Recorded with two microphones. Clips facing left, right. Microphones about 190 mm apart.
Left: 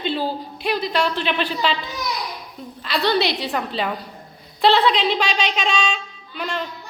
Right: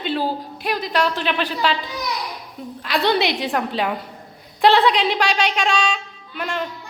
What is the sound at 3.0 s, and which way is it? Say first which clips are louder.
A woman's voice: even; 15° right (ahead or behind).